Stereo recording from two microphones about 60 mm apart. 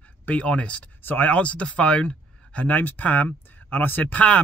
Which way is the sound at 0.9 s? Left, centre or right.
Left.